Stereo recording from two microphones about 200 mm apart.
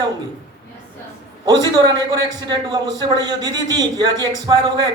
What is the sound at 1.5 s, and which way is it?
A man's voice, 20° right (ahead or behind).